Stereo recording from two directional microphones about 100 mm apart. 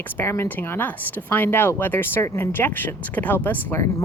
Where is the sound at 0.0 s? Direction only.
25° left (ahead or behind).